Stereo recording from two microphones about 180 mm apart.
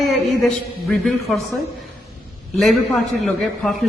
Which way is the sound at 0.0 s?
Centre (ahead or behind).